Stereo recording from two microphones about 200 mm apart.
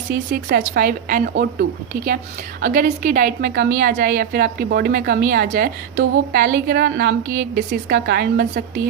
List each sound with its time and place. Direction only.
0.1 s a woman's voice: 55° right (ahead or behind)
2.6 s a woman's voice: 45° right (ahead or behind)